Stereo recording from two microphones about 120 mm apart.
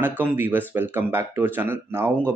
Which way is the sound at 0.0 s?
15° right (ahead or behind).